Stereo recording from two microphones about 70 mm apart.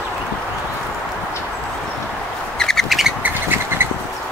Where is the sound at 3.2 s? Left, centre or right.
Right.